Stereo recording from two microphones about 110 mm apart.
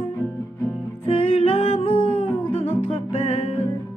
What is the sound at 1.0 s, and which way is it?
Music, 65° left (ahead or behind).